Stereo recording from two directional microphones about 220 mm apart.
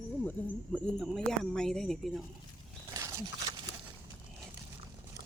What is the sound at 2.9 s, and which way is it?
Wild animals, 15° right (ahead or behind).